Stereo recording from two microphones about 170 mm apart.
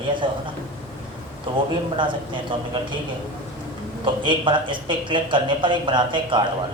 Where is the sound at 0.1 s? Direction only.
30° right (ahead or behind).